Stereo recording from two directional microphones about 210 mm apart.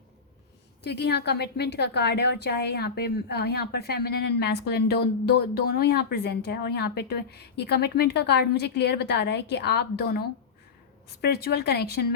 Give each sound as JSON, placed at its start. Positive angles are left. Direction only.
{"t": 0.9, "sound": "a woman's voice", "side_deg": 50}